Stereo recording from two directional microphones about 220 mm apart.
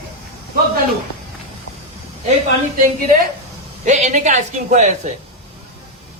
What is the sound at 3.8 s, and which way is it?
A woman's voice, 30° right (ahead or behind).